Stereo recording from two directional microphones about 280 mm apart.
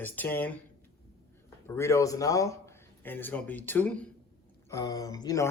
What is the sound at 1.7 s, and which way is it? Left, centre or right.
Speech, centre.